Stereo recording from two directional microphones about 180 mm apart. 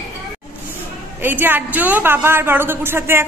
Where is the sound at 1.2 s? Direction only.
10° right (ahead or behind).